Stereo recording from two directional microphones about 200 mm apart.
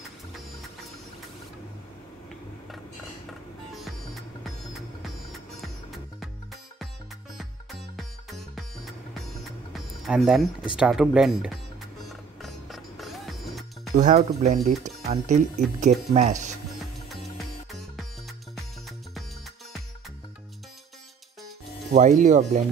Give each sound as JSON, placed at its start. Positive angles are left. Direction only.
{"t": 3.7, "sound": "music", "side_deg": 0}
{"t": 7.3, "sound": "music", "side_deg": 0}
{"t": 10.8, "sound": "speech", "side_deg": -5}
{"t": 12.4, "sound": "music", "side_deg": 0}
{"t": 13.9, "sound": "speech", "side_deg": -35}
{"t": 21.9, "sound": "speech", "side_deg": -40}